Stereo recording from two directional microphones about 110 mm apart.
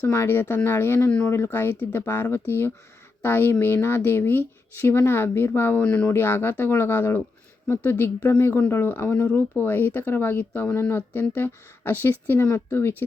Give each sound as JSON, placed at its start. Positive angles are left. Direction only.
{"t": 0.1, "sound": "speech", "side_deg": 20}